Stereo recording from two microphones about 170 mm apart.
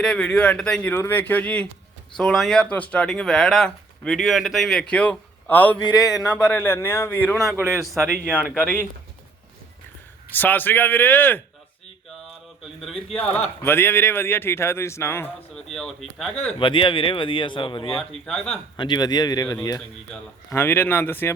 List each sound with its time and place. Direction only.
0.0 s speech: 5° left (ahead or behind)
7.5 s speech: 15° right (ahead or behind)
8.5 s speech: 15° left (ahead or behind)
10.2 s speech: 10° left (ahead or behind)
12.9 s speech: 35° left (ahead or behind)
13.2 s speech: 10° left (ahead or behind)
15.5 s speech: centre (ahead or behind)
16.6 s speech: 30° left (ahead or behind)
18.1 s speech: centre (ahead or behind)
18.8 s speech: 25° left (ahead or behind)